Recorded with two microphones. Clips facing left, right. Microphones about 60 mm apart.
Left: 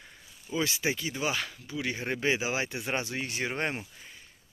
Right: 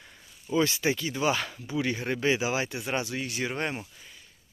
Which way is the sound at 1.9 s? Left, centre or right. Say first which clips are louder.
Right 1 dB; centre.